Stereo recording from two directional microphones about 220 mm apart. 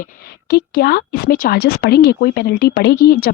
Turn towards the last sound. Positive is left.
turn(degrees=45)  # may be behind; listen again after turning